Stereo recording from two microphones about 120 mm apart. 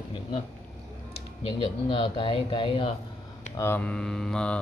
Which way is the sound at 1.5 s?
45° left (ahead or behind).